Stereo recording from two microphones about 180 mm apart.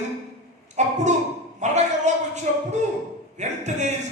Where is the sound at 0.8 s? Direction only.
40° right (ahead or behind).